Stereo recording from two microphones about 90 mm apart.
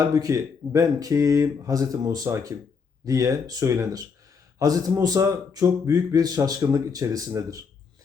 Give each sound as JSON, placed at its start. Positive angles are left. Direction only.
{"t": 0.0, "sound": "a man's voice", "side_deg": -40}